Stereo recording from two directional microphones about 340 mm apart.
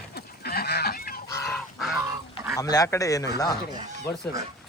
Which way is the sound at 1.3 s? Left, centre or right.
Centre.